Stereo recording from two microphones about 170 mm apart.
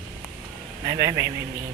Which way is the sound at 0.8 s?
20° right (ahead or behind).